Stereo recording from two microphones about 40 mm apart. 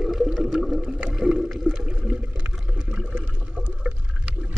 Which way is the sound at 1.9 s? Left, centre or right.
Right.